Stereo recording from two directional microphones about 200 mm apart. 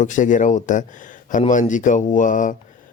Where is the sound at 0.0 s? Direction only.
40° left (ahead or behind).